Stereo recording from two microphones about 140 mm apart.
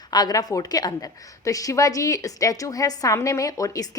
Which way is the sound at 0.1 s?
30° left (ahead or behind).